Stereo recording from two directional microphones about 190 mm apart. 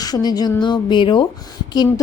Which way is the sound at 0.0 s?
20° left (ahead or behind).